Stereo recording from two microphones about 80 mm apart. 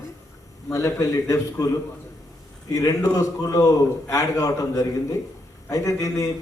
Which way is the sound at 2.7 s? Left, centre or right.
Left.